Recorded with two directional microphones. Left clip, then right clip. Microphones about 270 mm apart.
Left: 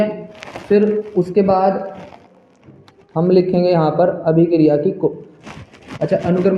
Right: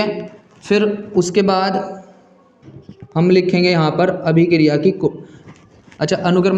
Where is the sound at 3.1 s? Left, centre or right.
Right.